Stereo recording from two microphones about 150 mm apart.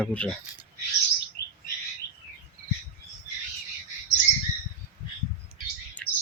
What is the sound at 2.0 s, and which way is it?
Chirp, 90° left.